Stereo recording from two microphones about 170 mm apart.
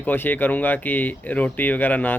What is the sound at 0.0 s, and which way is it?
Speech, 10° left (ahead or behind).